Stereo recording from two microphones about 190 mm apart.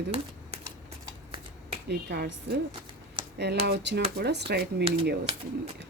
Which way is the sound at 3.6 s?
60° right (ahead or behind).